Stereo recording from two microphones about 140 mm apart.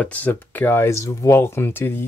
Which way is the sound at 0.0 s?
10° left (ahead or behind).